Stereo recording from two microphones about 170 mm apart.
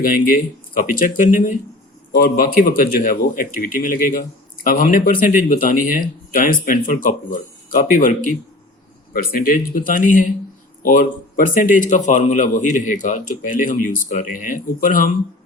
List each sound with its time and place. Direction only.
0.0 s speech: 55° left (ahead or behind)
9.8 s speech: 55° left (ahead or behind)